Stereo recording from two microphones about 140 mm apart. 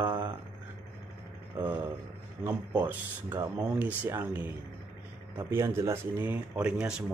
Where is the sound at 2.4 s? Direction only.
15° right (ahead or behind).